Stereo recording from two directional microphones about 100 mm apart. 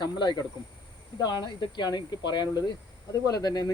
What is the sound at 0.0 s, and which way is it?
Speech, 45° left (ahead or behind).